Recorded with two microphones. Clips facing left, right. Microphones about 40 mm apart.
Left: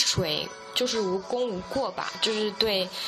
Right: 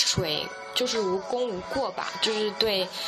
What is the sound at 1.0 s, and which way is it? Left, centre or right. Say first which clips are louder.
Speech: right 1 dB; right.